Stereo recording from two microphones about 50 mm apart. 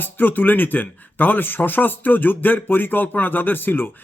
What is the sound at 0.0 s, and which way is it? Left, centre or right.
Speech, left.